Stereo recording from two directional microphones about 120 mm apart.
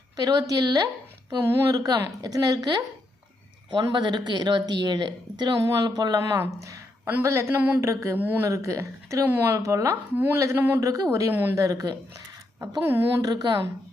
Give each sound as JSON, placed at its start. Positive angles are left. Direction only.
{"t": 0.2, "sound": "speech", "side_deg": -30}
{"t": 3.8, "sound": "a woman's voice", "side_deg": -40}
{"t": 12.8, "sound": "a woman's voice", "side_deg": -20}
{"t": 13.2, "sound": "speech", "side_deg": -35}